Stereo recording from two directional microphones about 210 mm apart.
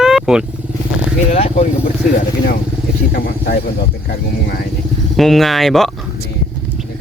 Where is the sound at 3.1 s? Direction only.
45° left (ahead or behind).